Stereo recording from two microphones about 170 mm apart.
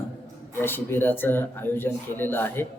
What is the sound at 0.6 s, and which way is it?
Speech, 10° left (ahead or behind).